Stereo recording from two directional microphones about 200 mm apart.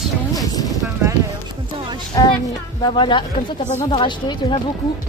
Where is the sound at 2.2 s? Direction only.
20° left (ahead or behind).